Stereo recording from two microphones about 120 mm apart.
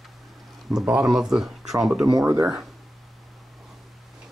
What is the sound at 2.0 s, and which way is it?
Speech, 25° right (ahead or behind).